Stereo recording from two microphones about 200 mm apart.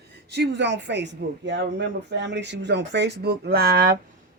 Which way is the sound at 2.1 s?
60° right (ahead or behind).